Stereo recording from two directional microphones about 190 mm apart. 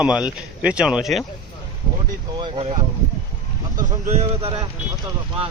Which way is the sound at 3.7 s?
40° right (ahead or behind).